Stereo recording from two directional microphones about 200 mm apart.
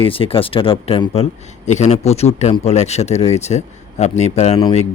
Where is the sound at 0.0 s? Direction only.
25° left (ahead or behind).